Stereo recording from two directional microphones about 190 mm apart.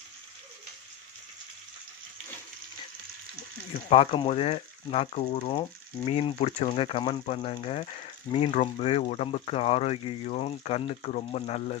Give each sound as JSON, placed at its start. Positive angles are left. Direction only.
{"t": 3.8, "sound": "speech", "side_deg": 30}